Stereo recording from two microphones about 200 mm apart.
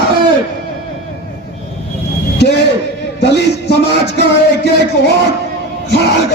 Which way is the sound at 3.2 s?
55° left (ahead or behind).